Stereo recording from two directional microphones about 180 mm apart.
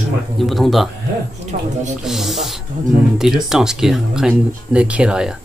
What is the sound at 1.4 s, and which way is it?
Speech, 40° right (ahead or behind).